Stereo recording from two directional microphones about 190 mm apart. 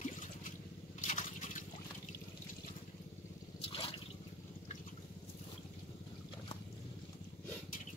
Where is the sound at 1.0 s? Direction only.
40° left (ahead or behind).